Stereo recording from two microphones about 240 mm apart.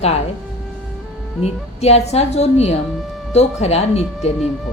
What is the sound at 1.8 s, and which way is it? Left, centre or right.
A woman's voice, left.